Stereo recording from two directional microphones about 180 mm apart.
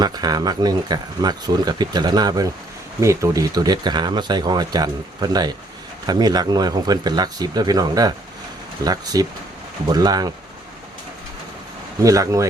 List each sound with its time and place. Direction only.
0.0 s speech: 20° right (ahead or behind)
12.0 s speech: 20° right (ahead or behind)